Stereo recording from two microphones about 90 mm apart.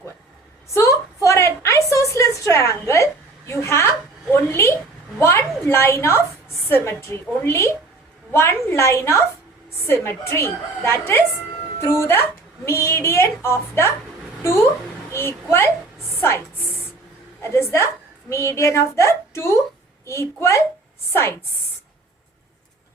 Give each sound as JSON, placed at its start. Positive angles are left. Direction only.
{"t": 0.7, "sound": "a sound", "side_deg": 35}
{"t": 6.7, "sound": "a woman's voice", "side_deg": 30}
{"t": 15.1, "sound": "a child's voice", "side_deg": 30}
{"t": 17.4, "sound": "a woman's voice", "side_deg": 30}